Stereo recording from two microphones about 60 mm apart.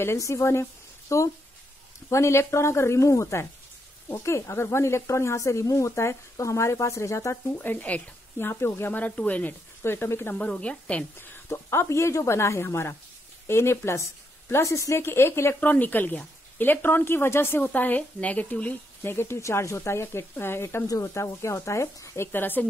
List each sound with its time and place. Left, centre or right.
0.2 s a woman's voice: left
7.5 s a woman's voice: left
8.4 s speech: left
8.9 s speech: left
9.8 s a woman's voice: left
10.5 s speech: centre
11.1 s speech: left
15.0 s speech: left
15.6 s a woman's voice: left
19.0 s speech: left
22.4 s a woman's voice: left